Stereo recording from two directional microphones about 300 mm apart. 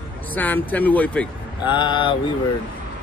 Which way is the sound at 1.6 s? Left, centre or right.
Centre.